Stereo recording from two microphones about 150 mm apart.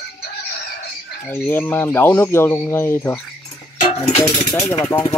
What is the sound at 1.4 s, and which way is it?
Speech, 15° left (ahead or behind).